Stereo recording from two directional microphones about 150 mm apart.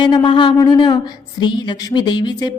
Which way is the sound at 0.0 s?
30° left (ahead or behind).